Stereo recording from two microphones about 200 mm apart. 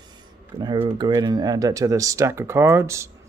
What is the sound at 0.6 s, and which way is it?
Speech, 20° right (ahead or behind).